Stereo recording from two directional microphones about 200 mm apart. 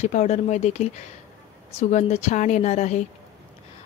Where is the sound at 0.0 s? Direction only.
35° left (ahead or behind).